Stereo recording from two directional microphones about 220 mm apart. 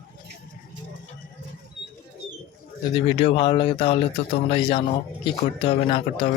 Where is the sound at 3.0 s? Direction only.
25° left (ahead or behind).